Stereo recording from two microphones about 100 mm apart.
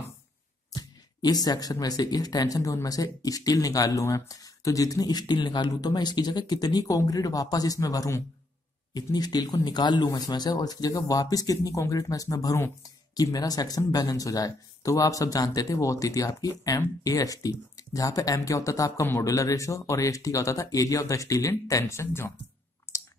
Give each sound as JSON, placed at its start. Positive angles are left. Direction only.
{"t": 0.7, "sound": "speech", "side_deg": 40}
{"t": 22.9, "sound": "chewing", "side_deg": 30}